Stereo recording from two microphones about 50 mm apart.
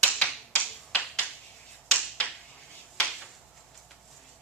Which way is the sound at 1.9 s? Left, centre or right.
Left.